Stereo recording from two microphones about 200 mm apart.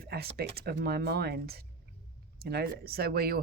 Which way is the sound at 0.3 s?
50° right (ahead or behind).